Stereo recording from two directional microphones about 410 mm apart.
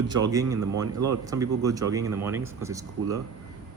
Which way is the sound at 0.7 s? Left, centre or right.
Right.